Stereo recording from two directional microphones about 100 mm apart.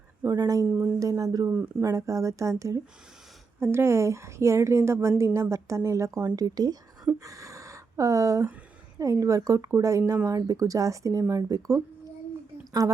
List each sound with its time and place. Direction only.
0.3 s speech: 40° right (ahead or behind)
0.7 s speech: 15° right (ahead or behind)
0.9 s a woman's voice: 35° right (ahead or behind)
7.3 s a sound: 30° right (ahead or behind)
9.0 s speech: 30° right (ahead or behind)
12.8 s speech: 35° right (ahead or behind)